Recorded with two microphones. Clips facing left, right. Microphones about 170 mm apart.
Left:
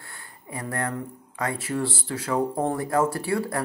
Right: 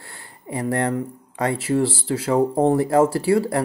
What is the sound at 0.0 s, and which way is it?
Speech, 30° right (ahead or behind).